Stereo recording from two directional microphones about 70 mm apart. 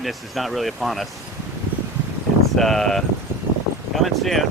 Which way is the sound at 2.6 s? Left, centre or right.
Centre.